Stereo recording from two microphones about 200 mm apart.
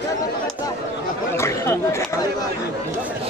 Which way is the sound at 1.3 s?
15° left (ahead or behind).